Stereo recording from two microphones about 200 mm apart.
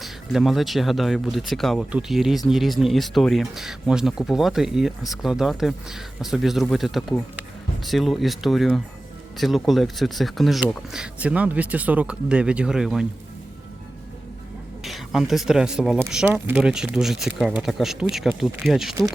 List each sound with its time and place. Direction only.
0.0 s speech: centre (ahead or behind)
14.8 s speech: centre (ahead or behind)